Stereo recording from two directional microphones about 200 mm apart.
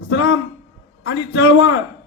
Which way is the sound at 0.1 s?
60° left (ahead or behind).